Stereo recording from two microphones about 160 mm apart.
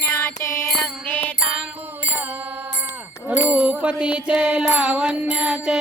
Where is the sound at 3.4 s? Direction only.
10° right (ahead or behind).